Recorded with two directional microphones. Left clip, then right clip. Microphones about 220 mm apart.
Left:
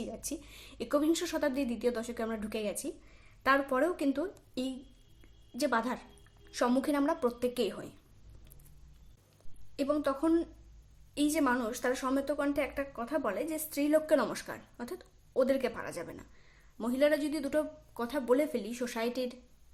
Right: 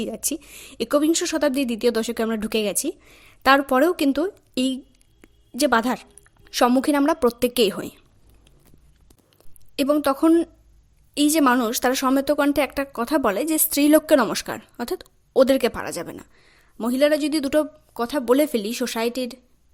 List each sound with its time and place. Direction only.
0.0 s a woman's voice: 40° right (ahead or behind)
9.7 s a woman's voice: 35° right (ahead or behind)